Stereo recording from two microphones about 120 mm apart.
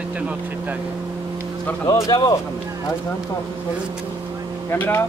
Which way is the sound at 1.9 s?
30° left (ahead or behind).